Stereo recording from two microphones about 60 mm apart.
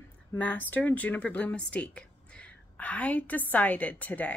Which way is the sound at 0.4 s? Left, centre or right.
Left.